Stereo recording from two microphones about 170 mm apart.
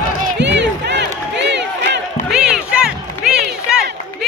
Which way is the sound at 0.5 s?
90° right.